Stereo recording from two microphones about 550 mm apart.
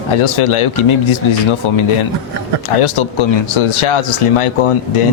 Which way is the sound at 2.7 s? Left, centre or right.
Left.